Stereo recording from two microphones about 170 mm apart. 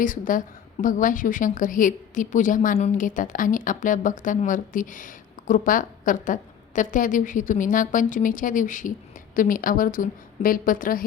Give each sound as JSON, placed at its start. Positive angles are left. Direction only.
{"t": 0.0, "sound": "a woman's voice", "side_deg": 50}